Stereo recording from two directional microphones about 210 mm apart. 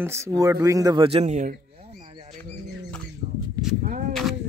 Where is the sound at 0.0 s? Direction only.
15° right (ahead or behind); by 1.5 s 35° right (ahead or behind).